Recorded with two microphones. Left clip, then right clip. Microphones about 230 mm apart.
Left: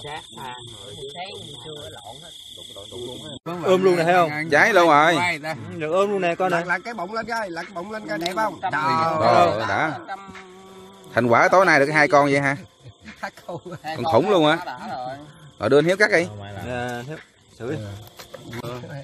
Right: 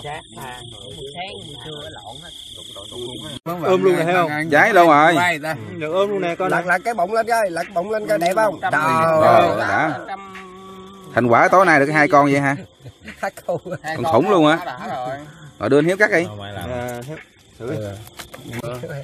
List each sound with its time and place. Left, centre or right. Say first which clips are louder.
0.0 s speech: right 2 dB; left
1.1 s speech: right 3 dB; centre
3.6 s speech: right 1 dB; left
4.5 s speech: right 4 dB; centre
5.2 s speech: right 5 dB; right
5.7 s speech: right 1 dB; left
6.7 s speech: right 7 dB; right
9.7 s speech: right 4 dB; centre
11.1 s speech: right 3 dB; centre
13.2 s speech: right 9 dB; right
13.8 s speech: right 2 dB; centre
16.3 s speech: right 5 dB; right
16.6 s speech: even; left